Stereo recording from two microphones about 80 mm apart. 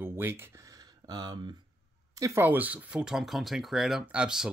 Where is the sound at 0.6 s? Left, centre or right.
Right.